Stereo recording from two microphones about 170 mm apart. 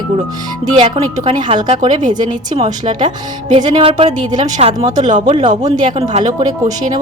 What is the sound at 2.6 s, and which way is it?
Speech, 45° right (ahead or behind).